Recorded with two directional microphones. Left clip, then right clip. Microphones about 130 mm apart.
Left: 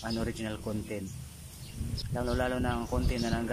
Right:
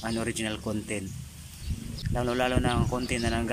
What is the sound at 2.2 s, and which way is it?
Speech, centre (ahead or behind).